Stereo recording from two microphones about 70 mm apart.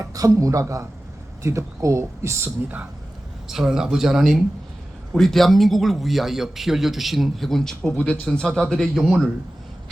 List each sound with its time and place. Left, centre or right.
0.0 s a man's voice: right
3.4 s speech: centre